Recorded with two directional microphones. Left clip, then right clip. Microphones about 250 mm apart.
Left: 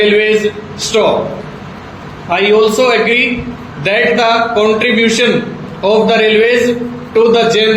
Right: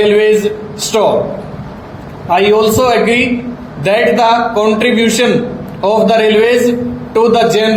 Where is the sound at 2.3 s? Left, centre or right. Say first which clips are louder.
Even; right.